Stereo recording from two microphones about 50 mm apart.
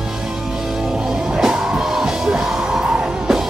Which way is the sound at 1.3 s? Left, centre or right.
Centre.